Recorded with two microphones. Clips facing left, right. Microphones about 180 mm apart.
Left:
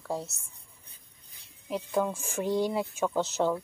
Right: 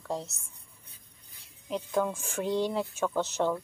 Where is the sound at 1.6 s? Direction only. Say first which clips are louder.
Even; 5° left (ahead or behind).